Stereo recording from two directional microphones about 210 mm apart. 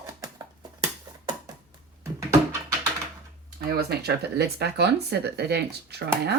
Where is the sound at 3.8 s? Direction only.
50° right (ahead or behind).